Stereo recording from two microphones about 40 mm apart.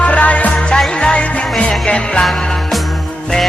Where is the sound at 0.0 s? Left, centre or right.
Left.